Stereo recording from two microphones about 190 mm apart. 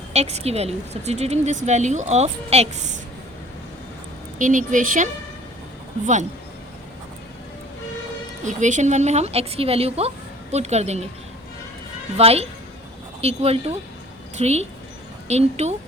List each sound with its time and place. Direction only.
0.1 s a woman's voice: 35° right (ahead or behind)
4.4 s a woman's voice: 40° right (ahead or behind)
8.4 s a woman's voice: 40° right (ahead or behind)
12.1 s a woman's voice: 35° right (ahead or behind)